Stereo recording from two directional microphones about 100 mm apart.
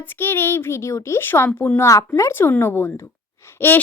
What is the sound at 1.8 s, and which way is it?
A woman's voice, 30° left (ahead or behind).